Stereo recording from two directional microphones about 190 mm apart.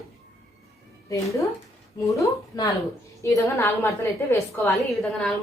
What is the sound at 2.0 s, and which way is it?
A woman's voice, 15° left (ahead or behind).